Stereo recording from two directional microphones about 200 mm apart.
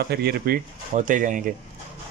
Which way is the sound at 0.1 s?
50° right (ahead or behind).